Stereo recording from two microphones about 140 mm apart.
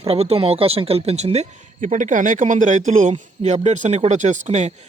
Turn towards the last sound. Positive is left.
turn(degrees=-55)  # may be behind; listen again after turning